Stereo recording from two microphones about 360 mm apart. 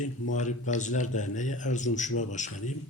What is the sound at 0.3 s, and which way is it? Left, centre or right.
A man's voice, centre.